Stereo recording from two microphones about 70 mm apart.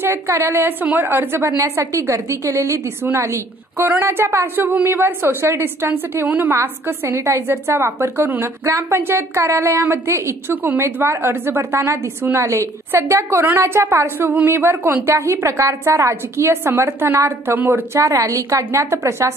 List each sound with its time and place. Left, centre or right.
0.0 s a woman's voice: right
1.6 s a woman's voice: right
3.0 s a woman's voice: right
4.6 s a woman's voice: right
11.8 s a woman's voice: right
12.2 s a woman's voice: right
12.4 s a woman's voice: right
17.5 s a woman's voice: right
17.9 s a woman's voice: right